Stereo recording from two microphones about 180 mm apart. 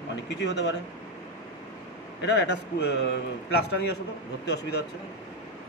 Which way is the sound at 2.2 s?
75° left (ahead or behind).